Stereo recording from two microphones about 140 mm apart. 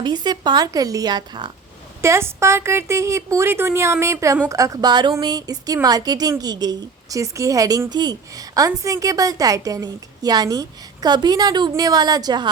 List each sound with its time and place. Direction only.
0.0 s a woman's voice: 30° right (ahead or behind)
2.0 s a woman's voice: 20° right (ahead or behind)